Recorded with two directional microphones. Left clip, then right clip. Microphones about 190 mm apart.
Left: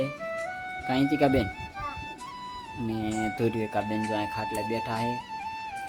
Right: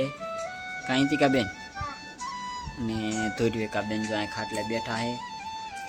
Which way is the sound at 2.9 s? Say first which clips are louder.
Even; centre (ahead or behind).